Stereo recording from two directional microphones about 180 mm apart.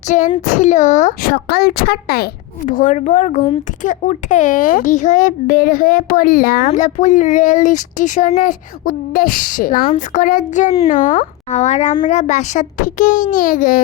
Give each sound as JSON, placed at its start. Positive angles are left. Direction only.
{"t": 0.1, "sound": "speech", "side_deg": 45}
{"t": 1.3, "sound": "speech", "side_deg": 60}